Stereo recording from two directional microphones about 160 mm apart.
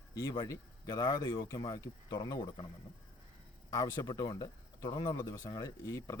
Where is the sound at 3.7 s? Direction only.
25° left (ahead or behind).